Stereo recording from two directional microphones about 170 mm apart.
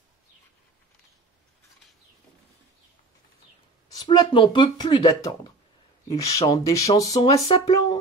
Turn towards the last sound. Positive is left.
turn(degrees=25)  # may be behind; listen again after turning